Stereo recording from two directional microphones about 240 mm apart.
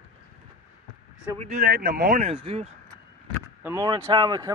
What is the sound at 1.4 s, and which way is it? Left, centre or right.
Speech, right.